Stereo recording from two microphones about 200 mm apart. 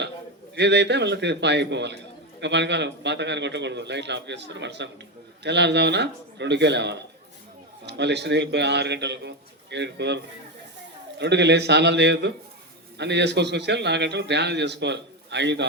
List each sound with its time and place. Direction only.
0.5 s a man's voice: 60° right (ahead or behind)
11.2 s a man's voice: 60° right (ahead or behind)